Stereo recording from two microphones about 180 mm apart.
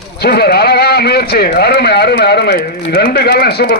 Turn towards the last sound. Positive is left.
turn(degrees=60)  # may be behind; listen again after turning